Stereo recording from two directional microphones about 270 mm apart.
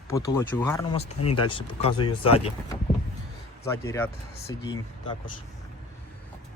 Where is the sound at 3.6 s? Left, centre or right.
Centre.